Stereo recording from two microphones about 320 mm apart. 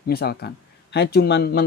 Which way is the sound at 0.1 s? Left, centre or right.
Left.